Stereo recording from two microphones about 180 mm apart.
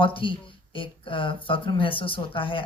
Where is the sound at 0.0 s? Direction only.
30° left (ahead or behind).